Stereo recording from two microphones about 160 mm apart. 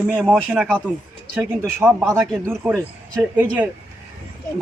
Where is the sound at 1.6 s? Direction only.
15° right (ahead or behind).